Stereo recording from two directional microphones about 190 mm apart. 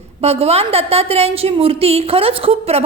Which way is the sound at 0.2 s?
35° right (ahead or behind).